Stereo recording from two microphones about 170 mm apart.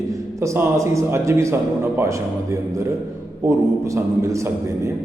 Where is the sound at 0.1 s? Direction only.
15° right (ahead or behind).